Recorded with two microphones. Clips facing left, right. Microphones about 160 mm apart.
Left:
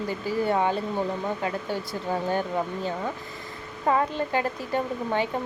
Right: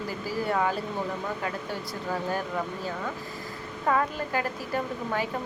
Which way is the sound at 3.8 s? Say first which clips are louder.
Left 2 dB; 25° left (ahead or behind).